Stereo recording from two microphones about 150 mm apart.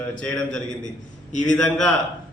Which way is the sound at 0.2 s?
5° left (ahead or behind).